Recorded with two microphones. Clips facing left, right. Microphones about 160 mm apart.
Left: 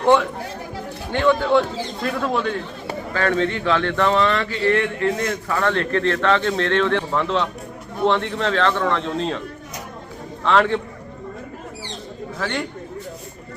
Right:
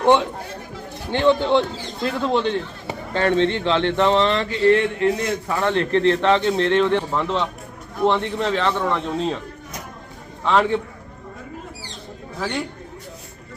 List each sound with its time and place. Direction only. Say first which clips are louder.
0.0 s a man's voice: even; 20° right (ahead or behind)
10.4 s a man's voice: left 1 dB; 15° right (ahead or behind)
12.4 s a man's voice: even; 10° right (ahead or behind)